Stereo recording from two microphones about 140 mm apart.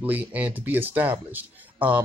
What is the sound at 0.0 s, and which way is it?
Speech, 10° right (ahead or behind).